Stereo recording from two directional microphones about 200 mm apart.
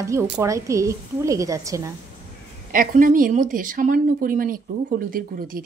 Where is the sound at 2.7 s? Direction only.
40° right (ahead or behind).